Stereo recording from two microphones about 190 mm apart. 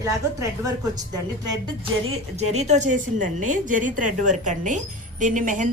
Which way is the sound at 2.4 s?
35° right (ahead or behind).